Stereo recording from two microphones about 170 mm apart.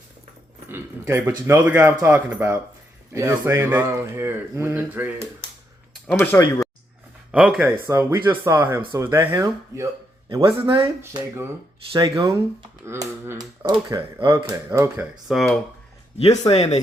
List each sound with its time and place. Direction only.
0.7 s a sound: 15° right (ahead or behind)
1.5 s speech: 15° right (ahead or behind)
6.3 s speech: 10° left (ahead or behind)
7.3 s speech: 5° right (ahead or behind)
10.2 s a man's voice: 30° right (ahead or behind)
11.0 s speech: 15° right (ahead or behind)
11.9 s speech: 30° right (ahead or behind)
15.3 s speech: centre (ahead or behind)
16.1 s speech: 40° left (ahead or behind)